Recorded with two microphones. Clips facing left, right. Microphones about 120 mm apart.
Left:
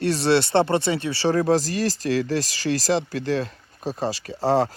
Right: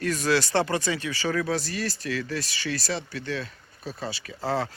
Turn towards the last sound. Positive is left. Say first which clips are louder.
# left 8 dB
turn(degrees=35)  # may be behind; listen again after turning